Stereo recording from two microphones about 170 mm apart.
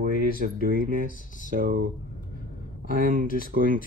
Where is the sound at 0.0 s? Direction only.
55° right (ahead or behind).